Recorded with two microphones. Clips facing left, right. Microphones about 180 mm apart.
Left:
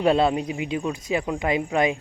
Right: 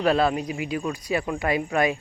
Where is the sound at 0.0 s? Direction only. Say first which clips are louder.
Left 2 dB; 25° left (ahead or behind).